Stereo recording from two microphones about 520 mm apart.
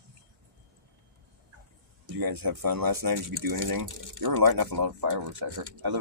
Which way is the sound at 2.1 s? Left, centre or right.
Right.